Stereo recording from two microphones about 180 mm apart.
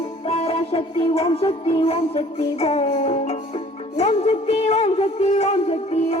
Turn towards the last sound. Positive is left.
turn(degrees=40)  # may be behind; listen again after turning